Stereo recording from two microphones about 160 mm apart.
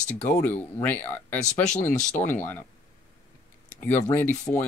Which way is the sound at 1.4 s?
50° left (ahead or behind).